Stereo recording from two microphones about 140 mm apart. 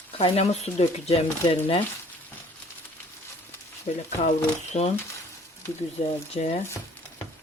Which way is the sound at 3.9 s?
40° left (ahead or behind).